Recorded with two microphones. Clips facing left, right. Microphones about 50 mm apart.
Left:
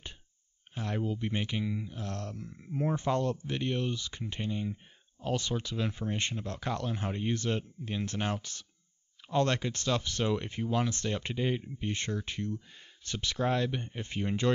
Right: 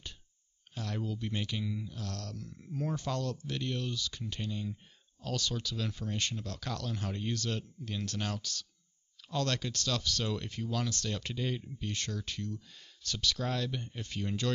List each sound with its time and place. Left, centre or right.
0.7 s speech: left